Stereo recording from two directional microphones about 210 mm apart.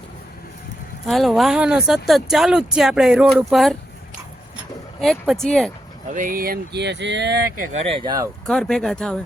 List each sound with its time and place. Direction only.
1.0 s speech: centre (ahead or behind)
4.9 s speech: centre (ahead or behind)
6.1 s speech: 40° right (ahead or behind); by 8.3 s 20° right (ahead or behind)
8.4 s speech: 5° left (ahead or behind)